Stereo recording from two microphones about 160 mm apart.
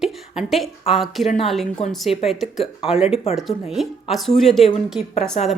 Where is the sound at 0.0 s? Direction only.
Centre (ahead or behind).